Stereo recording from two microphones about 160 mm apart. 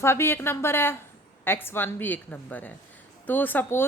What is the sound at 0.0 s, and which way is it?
A woman's voice, 15° left (ahead or behind).